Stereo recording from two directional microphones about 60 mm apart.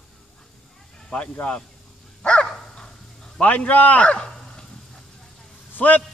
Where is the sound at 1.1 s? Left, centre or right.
Left.